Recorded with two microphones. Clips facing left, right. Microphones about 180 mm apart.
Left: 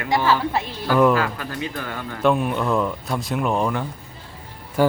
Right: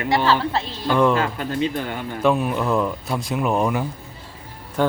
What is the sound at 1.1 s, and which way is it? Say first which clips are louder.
Speech: right 2 dB; 25° right (ahead or behind).